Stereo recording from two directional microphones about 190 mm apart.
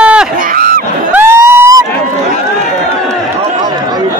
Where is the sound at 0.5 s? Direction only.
50° right (ahead or behind).